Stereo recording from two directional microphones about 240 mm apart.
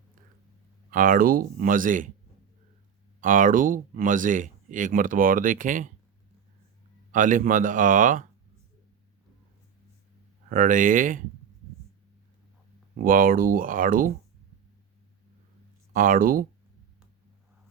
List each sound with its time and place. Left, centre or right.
0.9 s speech: right
3.2 s speech: right
7.1 s speech: right
10.5 s speech: right
13.0 s speech: right
15.9 s speech: right